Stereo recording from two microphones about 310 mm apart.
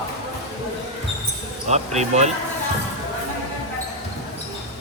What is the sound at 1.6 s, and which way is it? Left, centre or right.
Speech, right.